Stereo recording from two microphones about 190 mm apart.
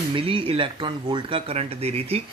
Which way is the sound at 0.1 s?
30° right (ahead or behind).